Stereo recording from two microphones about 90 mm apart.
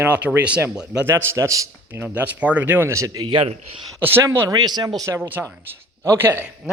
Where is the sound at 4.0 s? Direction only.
25° right (ahead or behind).